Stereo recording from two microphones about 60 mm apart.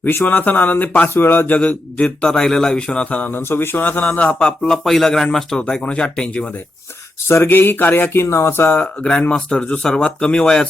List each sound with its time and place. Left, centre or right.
0.3 s speech: left
1.5 s a man's voice: left
3.3 s speech: left
4.6 s a man's voice: centre
7.3 s speech: left
8.7 s a man's voice: centre